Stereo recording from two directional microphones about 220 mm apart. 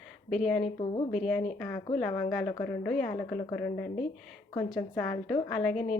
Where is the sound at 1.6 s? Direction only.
15° left (ahead or behind).